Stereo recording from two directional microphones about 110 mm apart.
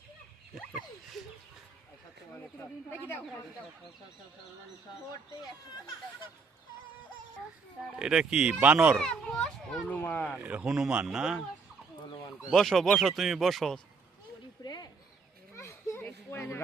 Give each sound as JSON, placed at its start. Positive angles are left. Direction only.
{"t": 0.7, "sound": "a sound", "side_deg": -5}
{"t": 2.9, "sound": "speech", "side_deg": 20}
{"t": 7.9, "sound": "speech", "side_deg": -5}
{"t": 9.0, "sound": "a child's voice", "side_deg": 5}
{"t": 9.9, "sound": "speech", "side_deg": 15}
{"t": 10.3, "sound": "speech", "side_deg": -10}
{"t": 12.5, "sound": "speech", "side_deg": 0}
{"t": 14.6, "sound": "a sound", "side_deg": 40}
{"t": 15.5, "sound": "a sound", "side_deg": 25}